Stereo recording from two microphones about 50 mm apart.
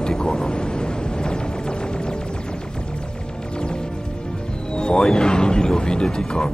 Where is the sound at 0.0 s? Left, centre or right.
Centre.